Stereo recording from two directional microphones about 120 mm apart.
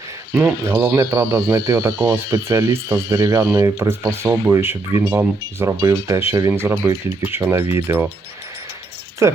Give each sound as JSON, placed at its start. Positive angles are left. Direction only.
{"t": 0.3, "sound": "speech", "side_deg": -20}
{"t": 9.2, "sound": "speech", "side_deg": -25}